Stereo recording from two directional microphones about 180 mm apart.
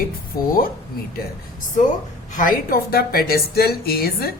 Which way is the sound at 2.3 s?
50° left (ahead or behind).